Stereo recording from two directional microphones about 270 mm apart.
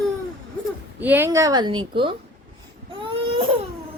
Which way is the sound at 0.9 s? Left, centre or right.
Centre.